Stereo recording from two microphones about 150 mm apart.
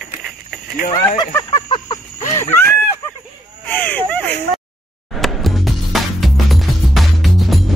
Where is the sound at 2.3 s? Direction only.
15° left (ahead or behind).